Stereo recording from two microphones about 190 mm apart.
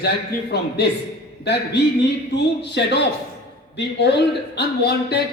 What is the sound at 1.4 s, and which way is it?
Speech, 60° left (ahead or behind).